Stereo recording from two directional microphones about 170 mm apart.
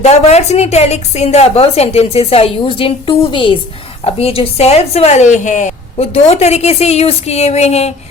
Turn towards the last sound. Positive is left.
turn(degrees=40)  # may be behind; listen again after turning